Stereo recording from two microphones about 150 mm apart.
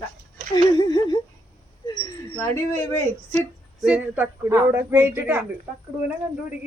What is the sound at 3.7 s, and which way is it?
A man's voice, 10° right (ahead or behind).